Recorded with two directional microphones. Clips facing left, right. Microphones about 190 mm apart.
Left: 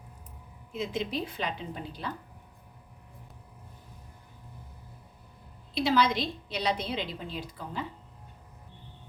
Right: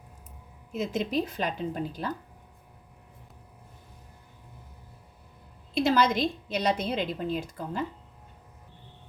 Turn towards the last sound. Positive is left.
turn(degrees=-45)  # may be behind; listen again after turning